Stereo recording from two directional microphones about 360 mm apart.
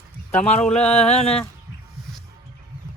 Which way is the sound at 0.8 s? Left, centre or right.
Centre.